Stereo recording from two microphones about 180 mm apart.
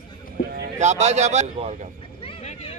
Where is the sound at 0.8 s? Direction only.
40° right (ahead or behind).